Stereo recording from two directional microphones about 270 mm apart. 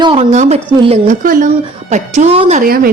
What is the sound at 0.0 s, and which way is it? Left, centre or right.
Speech, centre.